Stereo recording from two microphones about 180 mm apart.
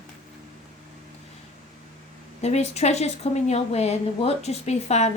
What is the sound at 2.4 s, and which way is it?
A woman's voice, 40° left (ahead or behind).